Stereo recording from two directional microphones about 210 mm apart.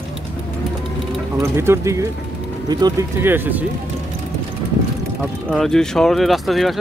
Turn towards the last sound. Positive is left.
turn(degrees=0)  # may be behind; listen again after turning